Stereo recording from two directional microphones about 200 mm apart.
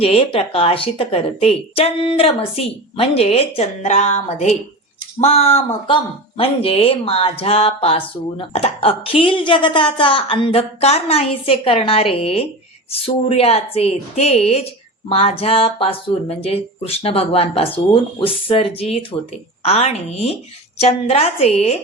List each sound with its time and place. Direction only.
0.0 s a woman's voice: 30° left (ahead or behind)